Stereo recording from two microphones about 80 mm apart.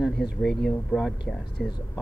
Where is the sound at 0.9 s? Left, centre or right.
Left.